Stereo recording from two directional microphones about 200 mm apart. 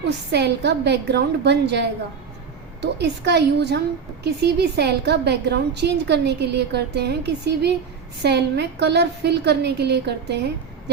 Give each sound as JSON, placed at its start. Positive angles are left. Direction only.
{"t": 0.3, "sound": "a woman's voice", "side_deg": -55}
{"t": 2.8, "sound": "a woman's voice", "side_deg": -55}